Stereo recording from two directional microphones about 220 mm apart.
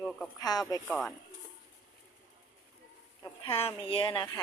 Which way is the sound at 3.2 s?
25° left (ahead or behind).